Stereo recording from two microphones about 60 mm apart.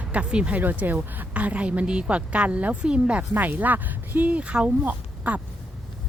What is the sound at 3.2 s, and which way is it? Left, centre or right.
A woman's voice, right.